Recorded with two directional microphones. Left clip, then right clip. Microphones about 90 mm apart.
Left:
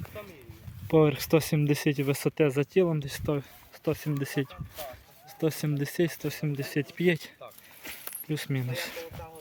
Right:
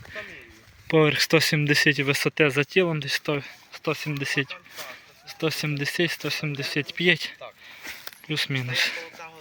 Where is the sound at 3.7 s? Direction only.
65° left (ahead or behind); by 7.3 s 40° left (ahead or behind).